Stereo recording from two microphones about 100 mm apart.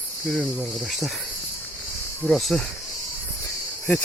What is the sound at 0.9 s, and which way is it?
Speech, centre (ahead or behind).